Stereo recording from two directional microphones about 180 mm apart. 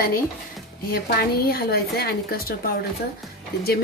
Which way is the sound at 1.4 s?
60° left (ahead or behind).